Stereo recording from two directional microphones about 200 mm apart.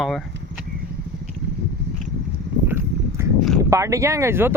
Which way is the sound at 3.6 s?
15° right (ahead or behind).